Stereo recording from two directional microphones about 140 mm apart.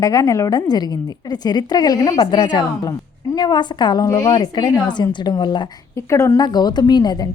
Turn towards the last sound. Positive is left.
turn(degrees=30)  # may be behind; listen again after turning